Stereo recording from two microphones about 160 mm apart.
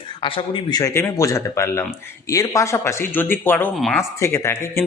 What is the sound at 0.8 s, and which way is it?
Speech, 15° left (ahead or behind).